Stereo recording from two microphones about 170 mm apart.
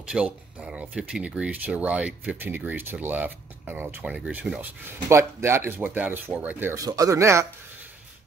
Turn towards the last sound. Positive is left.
turn(degrees=-15)  # may be behind; listen again after turning